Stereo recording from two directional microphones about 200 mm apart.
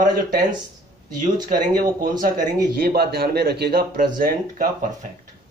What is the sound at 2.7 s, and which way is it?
Speech, 50° right (ahead or behind).